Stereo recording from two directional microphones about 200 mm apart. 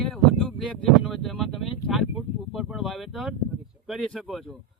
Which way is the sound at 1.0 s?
Centre (ahead or behind).